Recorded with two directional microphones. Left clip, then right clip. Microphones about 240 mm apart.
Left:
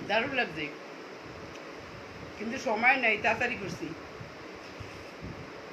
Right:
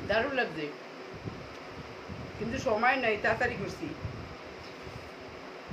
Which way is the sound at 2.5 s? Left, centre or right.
Centre.